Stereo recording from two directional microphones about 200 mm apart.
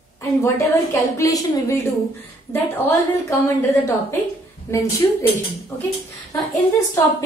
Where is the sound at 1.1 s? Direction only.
15° left (ahead or behind).